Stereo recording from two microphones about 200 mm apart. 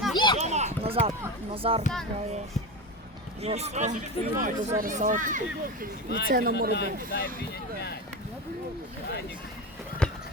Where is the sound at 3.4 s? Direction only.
30° right (ahead or behind).